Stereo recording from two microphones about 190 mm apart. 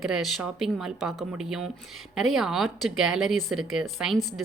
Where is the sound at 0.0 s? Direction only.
Centre (ahead or behind).